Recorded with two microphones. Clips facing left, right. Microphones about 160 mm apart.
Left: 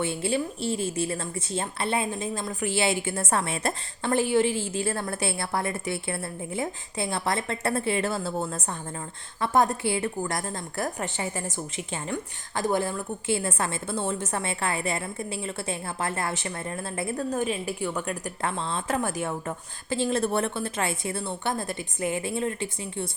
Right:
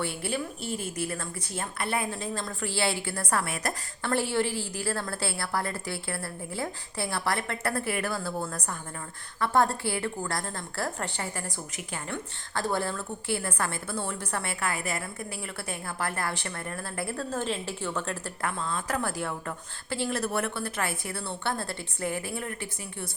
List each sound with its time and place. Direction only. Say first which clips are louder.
0.0 s a woman's voice: left 4 dB; 20° left (ahead or behind)
18.4 s a woman's voice: left 2 dB; 25° left (ahead or behind)